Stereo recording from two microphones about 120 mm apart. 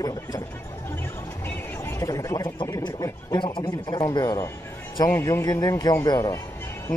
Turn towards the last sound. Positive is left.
turn(degrees=30)  # may be behind; listen again after turning